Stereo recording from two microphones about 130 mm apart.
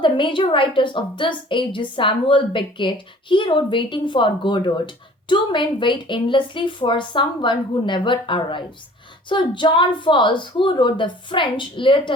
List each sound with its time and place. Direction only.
0.0 s a woman's voice: 40° left (ahead or behind)